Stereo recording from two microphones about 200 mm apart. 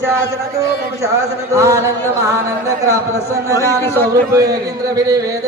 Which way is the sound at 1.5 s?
15° right (ahead or behind).